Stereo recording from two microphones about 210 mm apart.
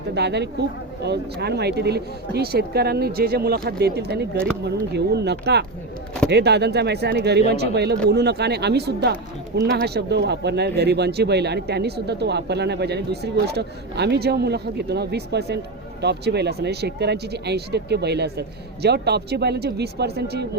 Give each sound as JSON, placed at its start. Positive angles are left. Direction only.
{"t": 0.1, "sound": "speech", "side_deg": -55}